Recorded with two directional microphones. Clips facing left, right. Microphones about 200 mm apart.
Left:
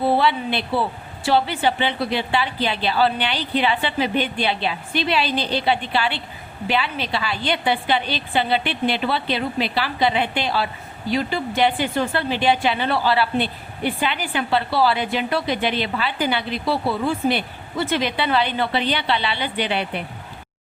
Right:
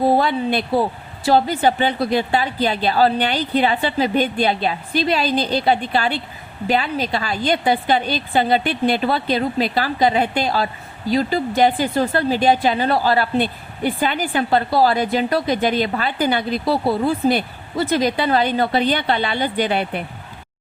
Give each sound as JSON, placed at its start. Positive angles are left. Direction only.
{"t": 0.0, "sound": "speech", "side_deg": -45}